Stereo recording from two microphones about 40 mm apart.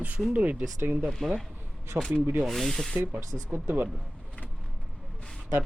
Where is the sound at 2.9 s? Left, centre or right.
Right.